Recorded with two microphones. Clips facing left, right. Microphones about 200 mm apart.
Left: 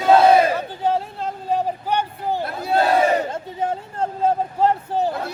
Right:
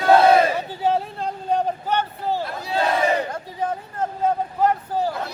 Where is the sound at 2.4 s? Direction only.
50° left (ahead or behind).